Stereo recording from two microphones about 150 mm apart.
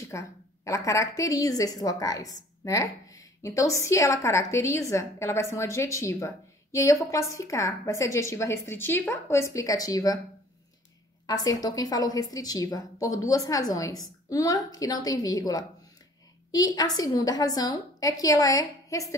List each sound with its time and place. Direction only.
0.1 s a woman's voice: 20° left (ahead or behind)
11.2 s a woman's voice: 25° left (ahead or behind)